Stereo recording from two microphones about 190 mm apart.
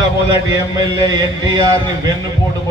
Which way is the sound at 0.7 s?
20° right (ahead or behind).